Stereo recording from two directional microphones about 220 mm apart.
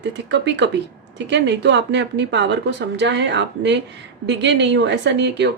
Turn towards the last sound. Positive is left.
turn(degrees=-55)  # may be behind; listen again after turning